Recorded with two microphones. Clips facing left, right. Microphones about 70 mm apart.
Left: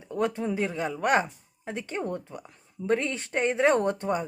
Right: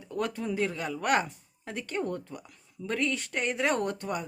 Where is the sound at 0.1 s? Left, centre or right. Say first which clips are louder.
Left 4 dB; left.